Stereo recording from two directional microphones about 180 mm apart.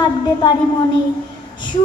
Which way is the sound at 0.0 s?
25° left (ahead or behind).